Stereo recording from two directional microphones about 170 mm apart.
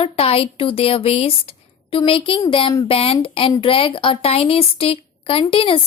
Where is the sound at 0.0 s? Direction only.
35° left (ahead or behind).